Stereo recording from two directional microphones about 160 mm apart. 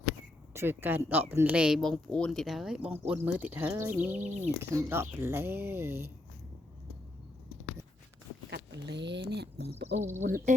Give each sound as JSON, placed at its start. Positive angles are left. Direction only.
{"t": 0.5, "sound": "speech", "side_deg": -15}
{"t": 4.1, "sound": "speech", "side_deg": -45}
{"t": 4.6, "sound": "speech", "side_deg": -15}
{"t": 8.4, "sound": "speech", "side_deg": -90}
{"t": 10.2, "sound": "speech", "side_deg": -55}